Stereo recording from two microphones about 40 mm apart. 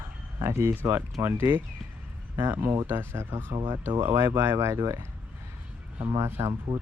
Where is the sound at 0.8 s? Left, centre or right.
Right.